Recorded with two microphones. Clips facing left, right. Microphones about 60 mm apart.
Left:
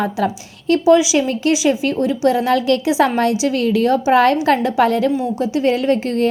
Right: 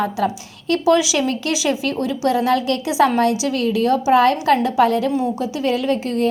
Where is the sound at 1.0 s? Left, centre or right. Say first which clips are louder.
Left 3 dB; centre.